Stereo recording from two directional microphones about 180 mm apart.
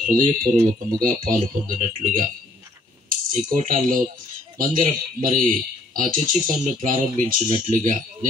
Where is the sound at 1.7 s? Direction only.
50° right (ahead or behind).